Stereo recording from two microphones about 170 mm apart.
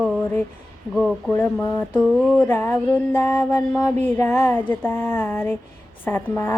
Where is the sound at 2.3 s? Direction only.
10° left (ahead or behind).